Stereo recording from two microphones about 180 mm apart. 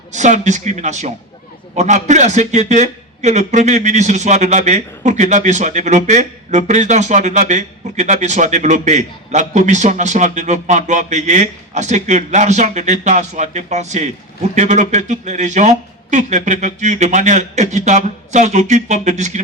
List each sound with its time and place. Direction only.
0.1 s a man's voice: 40° right (ahead or behind)